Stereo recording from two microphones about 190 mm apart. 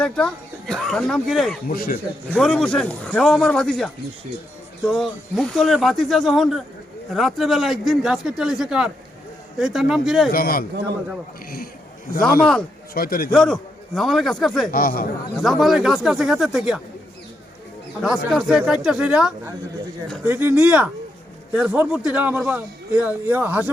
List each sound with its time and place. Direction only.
0.0 s speech: 5° left (ahead or behind)
1.6 s a man's voice: 50° left (ahead or behind)
2.3 s speech: 5° left (ahead or behind)
10.3 s a man's voice: 50° left (ahead or behind)
12.4 s speech: 5° left (ahead or behind)
12.9 s a man's voice: 50° left (ahead or behind)
13.3 s speech: 5° left (ahead or behind)
14.7 s a man's voice: 50° left (ahead or behind)
15.4 s speech: centre (ahead or behind)
18.0 s a man's voice: centre (ahead or behind)